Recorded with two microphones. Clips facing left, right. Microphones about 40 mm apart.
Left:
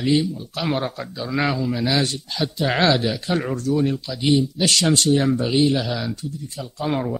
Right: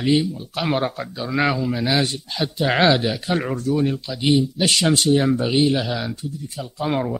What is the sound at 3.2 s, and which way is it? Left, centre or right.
Speech, centre.